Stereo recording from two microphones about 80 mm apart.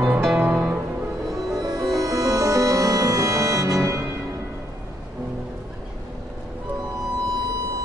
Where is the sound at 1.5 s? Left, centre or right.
Right.